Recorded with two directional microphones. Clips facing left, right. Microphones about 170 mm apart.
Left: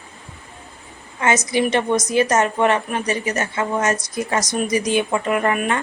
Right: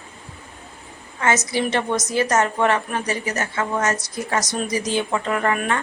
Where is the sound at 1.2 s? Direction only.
15° left (ahead or behind).